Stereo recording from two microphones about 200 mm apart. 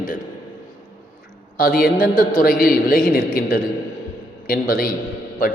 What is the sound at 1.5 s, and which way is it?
Speech, 45° left (ahead or behind).